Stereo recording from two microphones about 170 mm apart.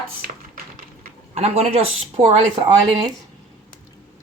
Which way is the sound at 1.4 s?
40° right (ahead or behind).